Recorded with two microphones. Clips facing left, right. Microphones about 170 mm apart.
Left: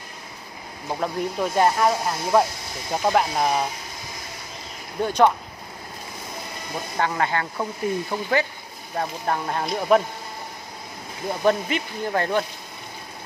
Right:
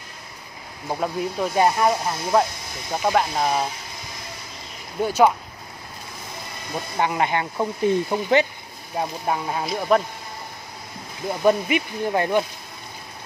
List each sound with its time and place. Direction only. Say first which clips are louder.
0.8 s speech: right 1 dB; 5° right (ahead or behind)
5.0 s speech: right 1 dB; 5° right (ahead or behind)
7.0 s speech: right 2 dB; 20° right (ahead or behind)
8.9 s speech: right 1 dB; 10° right (ahead or behind)
11.4 s speech: right 3 dB; 15° right (ahead or behind)